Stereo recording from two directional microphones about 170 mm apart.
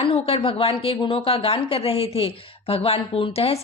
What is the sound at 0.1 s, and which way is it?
Speech, 35° left (ahead or behind).